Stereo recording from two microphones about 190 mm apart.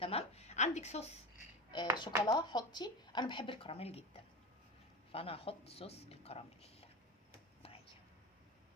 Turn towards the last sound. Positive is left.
turn(degrees=30)  # may be behind; listen again after turning